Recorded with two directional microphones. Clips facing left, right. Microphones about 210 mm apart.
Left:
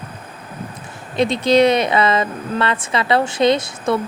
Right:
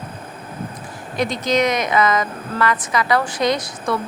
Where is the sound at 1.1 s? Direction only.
25° left (ahead or behind).